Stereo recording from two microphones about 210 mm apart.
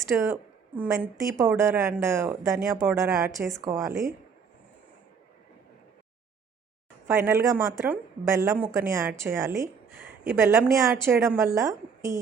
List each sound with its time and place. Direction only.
0.1 s a woman's voice: 5° right (ahead or behind)
7.1 s a woman's voice: 10° right (ahead or behind)